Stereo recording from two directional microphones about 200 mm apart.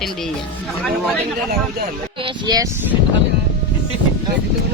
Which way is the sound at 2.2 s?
20° right (ahead or behind).